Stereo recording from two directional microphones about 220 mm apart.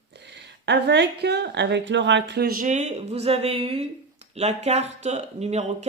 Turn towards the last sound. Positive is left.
turn(degrees=-30)  # may be behind; listen again after turning